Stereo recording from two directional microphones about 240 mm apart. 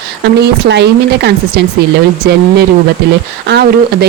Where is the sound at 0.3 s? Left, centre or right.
Right.